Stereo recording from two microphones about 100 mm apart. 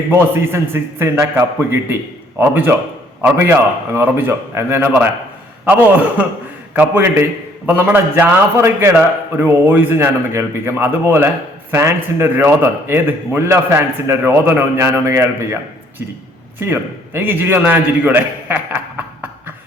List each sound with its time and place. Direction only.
0.1 s a man's voice: 25° right (ahead or behind)
16.6 s a man's voice: 25° right (ahead or behind)